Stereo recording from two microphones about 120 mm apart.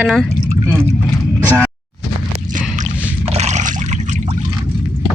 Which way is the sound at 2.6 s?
90° right.